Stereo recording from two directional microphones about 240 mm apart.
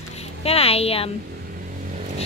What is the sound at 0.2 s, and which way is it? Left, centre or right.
Speech, left.